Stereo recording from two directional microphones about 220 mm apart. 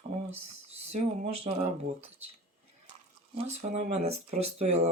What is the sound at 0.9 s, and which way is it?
Speech, 30° right (ahead or behind).